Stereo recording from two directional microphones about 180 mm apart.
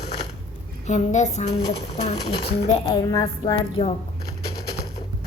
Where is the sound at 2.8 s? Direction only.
20° left (ahead or behind).